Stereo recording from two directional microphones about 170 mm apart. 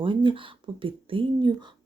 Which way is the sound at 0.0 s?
30° right (ahead or behind).